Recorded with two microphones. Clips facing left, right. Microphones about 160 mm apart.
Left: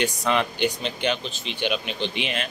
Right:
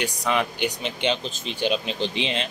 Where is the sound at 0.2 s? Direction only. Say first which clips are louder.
Left 1 dB; 10° right (ahead or behind).